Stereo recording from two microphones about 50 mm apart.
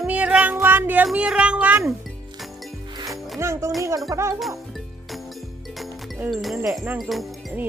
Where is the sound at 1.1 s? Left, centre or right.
Right.